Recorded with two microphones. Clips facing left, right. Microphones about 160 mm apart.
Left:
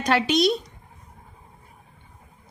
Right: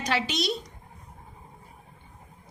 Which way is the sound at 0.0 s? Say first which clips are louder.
Left 8 dB; 55° left (ahead or behind).